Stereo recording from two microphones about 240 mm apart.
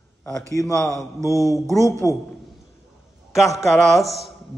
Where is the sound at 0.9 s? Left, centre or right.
Centre.